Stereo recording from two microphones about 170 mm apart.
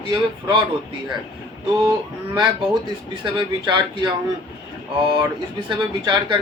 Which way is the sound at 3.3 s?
25° right (ahead or behind).